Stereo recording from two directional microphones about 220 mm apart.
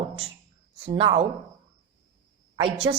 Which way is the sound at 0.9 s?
25° right (ahead or behind).